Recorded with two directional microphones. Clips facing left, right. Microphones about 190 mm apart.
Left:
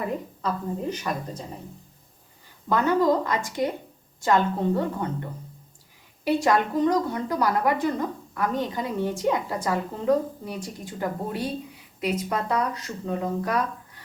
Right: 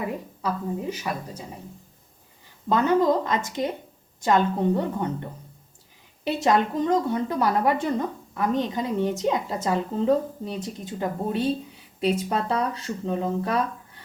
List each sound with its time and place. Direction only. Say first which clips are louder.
0.4 s a woman's voice: right 1 dB; 10° right (ahead or behind)
2.6 s speech: right 1 dB; 20° right (ahead or behind)
6.2 s speech: even; 20° right (ahead or behind)